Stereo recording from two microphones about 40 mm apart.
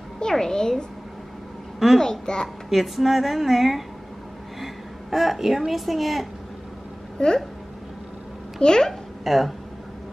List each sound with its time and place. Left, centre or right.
0.3 s speech: centre
2.0 s speech: centre
2.7 s a woman's voice: centre
5.1 s a woman's voice: centre
7.2 s speech: left
8.5 s speech: centre
9.2 s speech: centre